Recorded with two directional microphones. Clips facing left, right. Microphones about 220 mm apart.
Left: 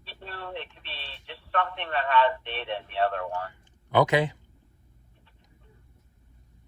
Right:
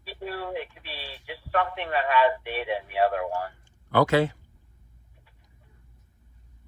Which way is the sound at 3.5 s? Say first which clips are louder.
Even; 20° left (ahead or behind).